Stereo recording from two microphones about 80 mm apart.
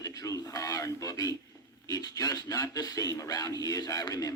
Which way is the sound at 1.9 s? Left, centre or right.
Left.